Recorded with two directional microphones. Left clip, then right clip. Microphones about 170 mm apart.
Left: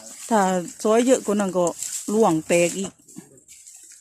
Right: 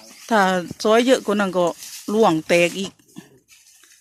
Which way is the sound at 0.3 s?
5° left (ahead or behind).